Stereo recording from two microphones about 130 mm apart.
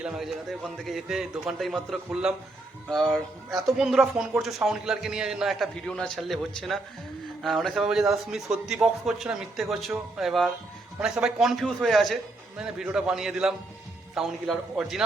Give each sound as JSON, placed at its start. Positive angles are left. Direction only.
{"t": 0.0, "sound": "speech", "side_deg": 0}